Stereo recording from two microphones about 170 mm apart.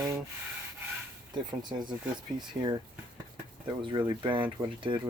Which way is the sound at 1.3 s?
25° right (ahead or behind).